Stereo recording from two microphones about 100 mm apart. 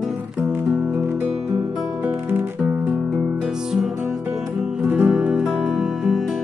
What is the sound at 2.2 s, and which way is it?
Guitar, 20° right (ahead or behind).